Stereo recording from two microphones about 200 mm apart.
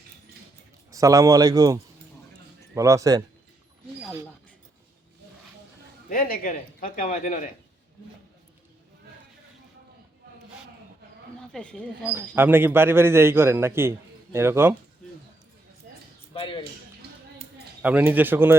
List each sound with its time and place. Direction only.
0.9 s a man's voice: 15° right (ahead or behind)
6.1 s speech: 45° left (ahead or behind)
11.5 s speech: 5° left (ahead or behind)
12.0 s a man's voice: 10° right (ahead or behind)
16.3 s a sound: 25° left (ahead or behind)
17.8 s a man's voice: 10° right (ahead or behind)